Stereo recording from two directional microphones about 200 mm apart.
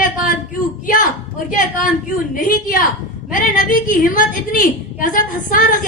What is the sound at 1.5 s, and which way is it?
A woman's voice, 45° left (ahead or behind).